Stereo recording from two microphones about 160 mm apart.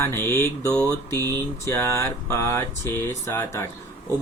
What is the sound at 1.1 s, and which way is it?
Speech, 20° right (ahead or behind).